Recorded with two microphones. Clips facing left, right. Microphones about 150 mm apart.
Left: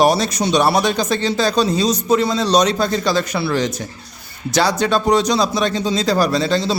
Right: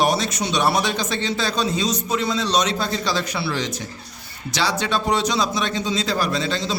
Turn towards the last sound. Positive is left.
turn(degrees=35)  # may be behind; listen again after turning